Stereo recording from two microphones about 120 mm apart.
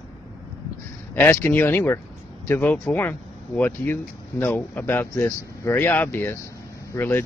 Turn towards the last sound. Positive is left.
turn(degrees=15)  # may be behind; listen again after turning